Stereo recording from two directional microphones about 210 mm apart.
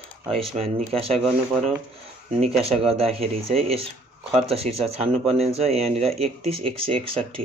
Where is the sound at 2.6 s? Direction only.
25° right (ahead or behind).